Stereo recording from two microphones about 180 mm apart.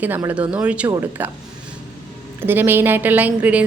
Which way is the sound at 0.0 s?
10° right (ahead or behind).